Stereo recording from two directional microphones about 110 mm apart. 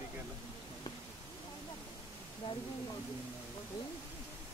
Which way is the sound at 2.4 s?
55° left (ahead or behind).